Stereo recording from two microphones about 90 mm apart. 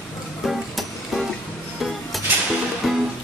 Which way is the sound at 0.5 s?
Centre (ahead or behind).